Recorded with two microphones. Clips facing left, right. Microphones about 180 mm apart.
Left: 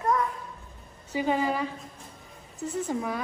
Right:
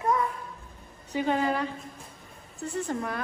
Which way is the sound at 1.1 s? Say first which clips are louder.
Even; 5° left (ahead or behind).